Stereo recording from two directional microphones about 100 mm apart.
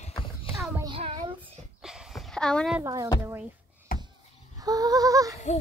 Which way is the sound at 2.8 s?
35° right (ahead or behind).